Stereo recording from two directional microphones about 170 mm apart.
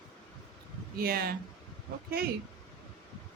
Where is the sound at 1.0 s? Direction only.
65° right (ahead or behind).